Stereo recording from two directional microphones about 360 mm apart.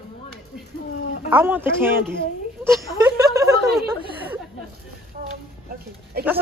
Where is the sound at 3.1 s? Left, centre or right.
Centre.